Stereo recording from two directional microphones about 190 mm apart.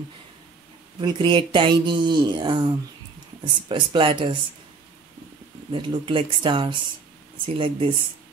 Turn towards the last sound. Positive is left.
turn(degrees=-30)  # may be behind; listen again after turning